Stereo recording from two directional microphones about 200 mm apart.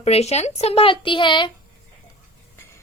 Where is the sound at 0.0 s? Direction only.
30° left (ahead or behind).